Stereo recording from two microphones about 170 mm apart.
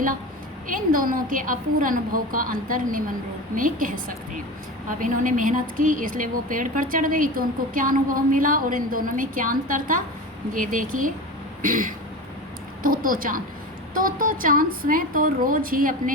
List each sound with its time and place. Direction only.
0.7 s a woman's voice: 55° right (ahead or behind)